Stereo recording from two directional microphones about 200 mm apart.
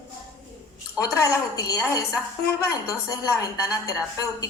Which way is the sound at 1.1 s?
15° left (ahead or behind).